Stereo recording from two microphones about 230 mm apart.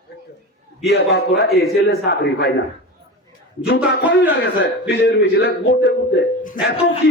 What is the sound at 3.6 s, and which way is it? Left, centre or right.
A man's voice, left.